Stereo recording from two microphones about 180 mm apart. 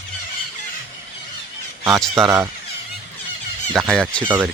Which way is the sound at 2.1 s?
15° right (ahead or behind).